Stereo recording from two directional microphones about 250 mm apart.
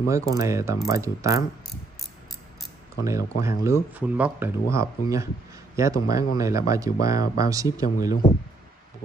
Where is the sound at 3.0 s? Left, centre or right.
Centre.